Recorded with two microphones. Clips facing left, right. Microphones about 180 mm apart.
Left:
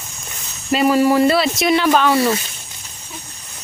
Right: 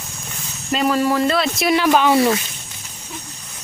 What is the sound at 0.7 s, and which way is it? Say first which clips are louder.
Speech: left 4 dB; 10° left (ahead or behind).